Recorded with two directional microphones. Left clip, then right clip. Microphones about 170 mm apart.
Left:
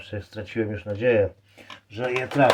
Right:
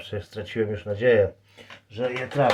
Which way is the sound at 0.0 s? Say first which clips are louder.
Right 2 dB; 25° right (ahead or behind).